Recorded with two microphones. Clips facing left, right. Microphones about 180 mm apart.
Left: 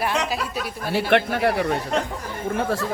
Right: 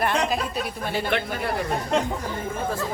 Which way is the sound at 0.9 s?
70° left (ahead or behind).